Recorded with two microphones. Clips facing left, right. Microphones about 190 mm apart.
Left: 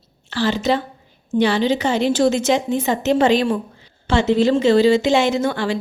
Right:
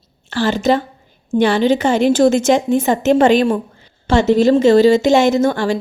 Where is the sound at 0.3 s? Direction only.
50° right (ahead or behind).